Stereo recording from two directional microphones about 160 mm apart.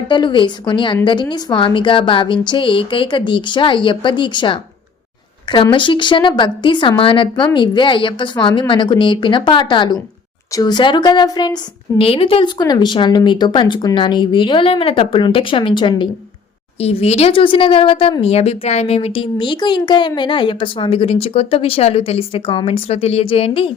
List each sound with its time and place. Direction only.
0.1 s speech: 30° left (ahead or behind)
5.7 s speech: 30° left (ahead or behind)
16.8 s speech: 40° left (ahead or behind)